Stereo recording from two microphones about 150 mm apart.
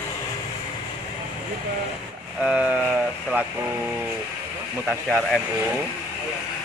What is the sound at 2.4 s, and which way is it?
Speech, 10° right (ahead or behind).